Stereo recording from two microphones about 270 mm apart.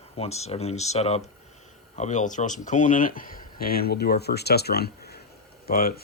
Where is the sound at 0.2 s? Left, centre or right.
Left.